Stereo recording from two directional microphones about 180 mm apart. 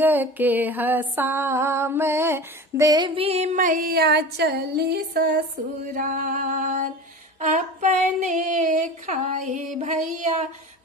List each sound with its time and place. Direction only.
0.0 s a sound: 10° right (ahead or behind); by 5.4 s 55° right (ahead or behind)
5.9 s female singing: 50° right (ahead or behind)
9.8 s music: 40° right (ahead or behind)